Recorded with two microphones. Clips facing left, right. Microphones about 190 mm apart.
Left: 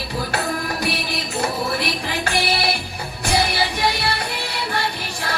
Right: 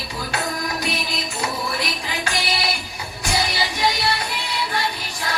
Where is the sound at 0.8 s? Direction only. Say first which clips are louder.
Left 2 dB; 60° left (ahead or behind).